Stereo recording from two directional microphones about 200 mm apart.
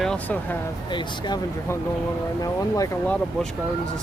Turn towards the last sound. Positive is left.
turn(degrees=10)  # may be behind; listen again after turning